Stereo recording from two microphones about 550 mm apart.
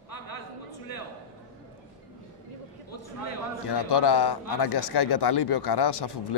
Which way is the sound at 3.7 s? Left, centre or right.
Left.